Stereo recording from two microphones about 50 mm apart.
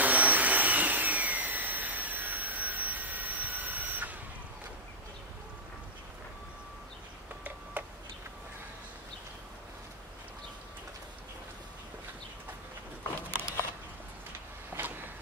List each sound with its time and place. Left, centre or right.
0.0 s vacuum cleaner: right
7.8 s tick-tock: right
13.3 s a sound: right